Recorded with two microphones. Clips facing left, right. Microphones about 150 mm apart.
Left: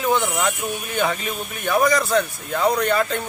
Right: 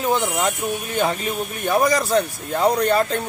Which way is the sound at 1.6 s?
30° right (ahead or behind).